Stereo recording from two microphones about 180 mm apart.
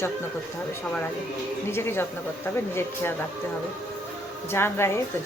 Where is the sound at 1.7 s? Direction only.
10° left (ahead or behind).